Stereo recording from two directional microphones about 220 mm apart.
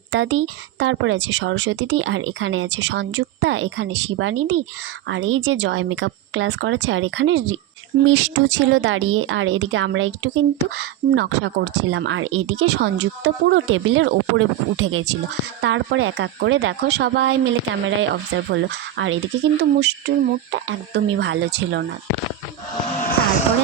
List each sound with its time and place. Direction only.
0.1 s speech: 60° right (ahead or behind)